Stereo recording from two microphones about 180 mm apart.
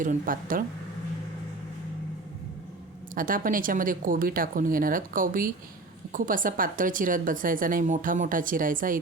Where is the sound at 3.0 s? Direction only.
50° right (ahead or behind).